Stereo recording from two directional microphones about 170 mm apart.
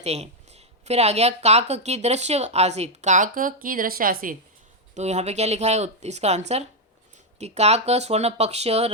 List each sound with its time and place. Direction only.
0.0 s speech: 40° right (ahead or behind); by 4.4 s 55° right (ahead or behind)
4.9 s speech: 40° right (ahead or behind)